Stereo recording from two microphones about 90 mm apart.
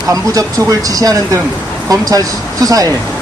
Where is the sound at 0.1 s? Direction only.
40° right (ahead or behind).